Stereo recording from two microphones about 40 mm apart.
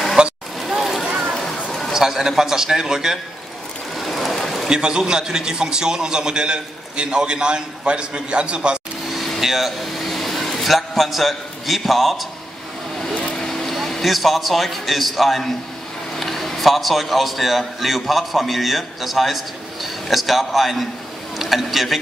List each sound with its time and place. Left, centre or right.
0.2 s a sound: right
0.6 s run: centre
1.9 s a man's voice: centre
3.9 s sewing machine: centre
4.6 s a man's voice: right
9.4 s speech: centre
13.4 s a man's voice: centre